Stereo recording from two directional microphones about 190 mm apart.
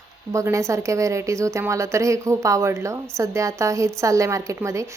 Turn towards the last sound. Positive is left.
turn(degrees=-15)  # may be behind; listen again after turning